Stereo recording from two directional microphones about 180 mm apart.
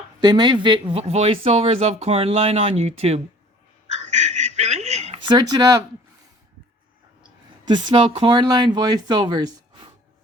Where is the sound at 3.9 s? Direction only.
40° right (ahead or behind); by 5.8 s 20° right (ahead or behind).